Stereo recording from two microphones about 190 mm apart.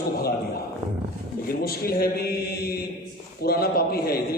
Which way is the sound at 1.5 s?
50° left (ahead or behind).